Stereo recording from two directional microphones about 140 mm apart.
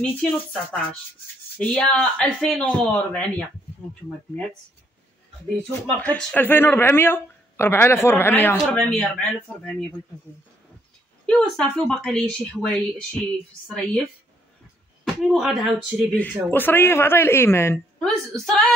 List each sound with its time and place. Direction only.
0.0 s speech: 10° left (ahead or behind)
1.6 s speech: 5° left (ahead or behind)
5.6 s speech: 10° left (ahead or behind)
11.2 s speech: 5° left (ahead or behind)
15.2 s speech: centre (ahead or behind)
16.4 s speech: 15° left (ahead or behind)
18.0 s speech: 5° left (ahead or behind)